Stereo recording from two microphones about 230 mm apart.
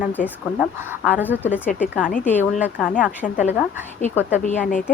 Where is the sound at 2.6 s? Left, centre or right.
Centre.